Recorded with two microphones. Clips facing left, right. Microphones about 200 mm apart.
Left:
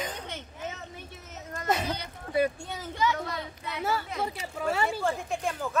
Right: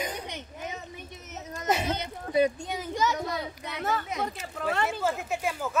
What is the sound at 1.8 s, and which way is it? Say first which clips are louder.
A child's voice: right 3 dB; 25° right (ahead or behind).